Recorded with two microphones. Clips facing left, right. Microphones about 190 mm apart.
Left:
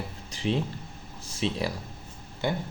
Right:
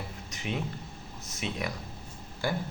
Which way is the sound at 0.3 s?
30° left (ahead or behind).